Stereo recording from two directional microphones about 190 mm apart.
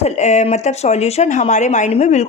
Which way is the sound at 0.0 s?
35° left (ahead or behind).